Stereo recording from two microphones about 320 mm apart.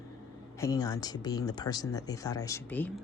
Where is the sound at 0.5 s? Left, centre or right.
Centre.